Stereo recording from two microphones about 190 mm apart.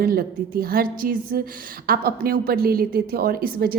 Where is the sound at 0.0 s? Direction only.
50° right (ahead or behind).